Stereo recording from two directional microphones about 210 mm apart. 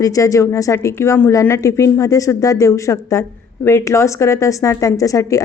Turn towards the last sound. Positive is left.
turn(degrees=15)  # may be behind; listen again after turning